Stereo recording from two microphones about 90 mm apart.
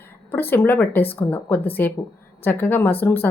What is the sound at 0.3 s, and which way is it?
A woman's voice, 25° left (ahead or behind).